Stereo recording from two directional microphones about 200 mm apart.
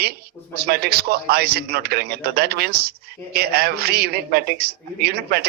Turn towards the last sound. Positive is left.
turn(degrees=-50)  # may be behind; listen again after turning